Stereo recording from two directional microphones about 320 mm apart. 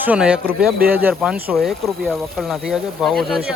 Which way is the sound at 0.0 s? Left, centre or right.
Centre.